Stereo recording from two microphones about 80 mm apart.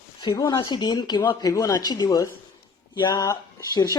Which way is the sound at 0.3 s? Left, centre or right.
Left.